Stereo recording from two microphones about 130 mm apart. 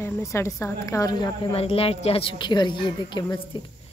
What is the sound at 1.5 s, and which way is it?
A woman's voice, 50° left (ahead or behind).